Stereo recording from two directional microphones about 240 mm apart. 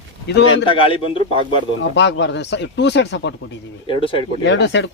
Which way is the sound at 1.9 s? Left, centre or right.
Left.